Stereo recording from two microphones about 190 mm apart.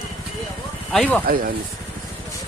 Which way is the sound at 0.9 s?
5° left (ahead or behind).